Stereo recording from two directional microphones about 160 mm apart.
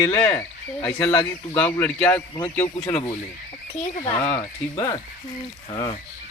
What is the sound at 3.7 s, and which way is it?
Speech, 45° left (ahead or behind).